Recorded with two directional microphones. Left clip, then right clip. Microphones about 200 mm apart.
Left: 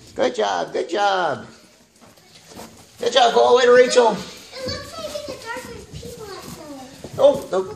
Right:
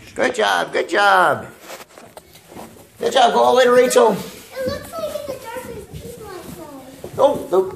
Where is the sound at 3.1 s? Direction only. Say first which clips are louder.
Right 1 dB; 30° right (ahead or behind).